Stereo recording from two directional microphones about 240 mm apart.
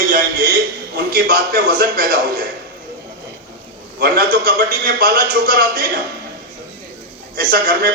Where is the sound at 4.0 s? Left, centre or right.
Right.